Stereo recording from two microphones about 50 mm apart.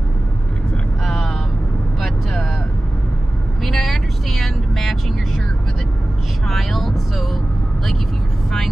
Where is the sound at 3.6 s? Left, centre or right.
Centre.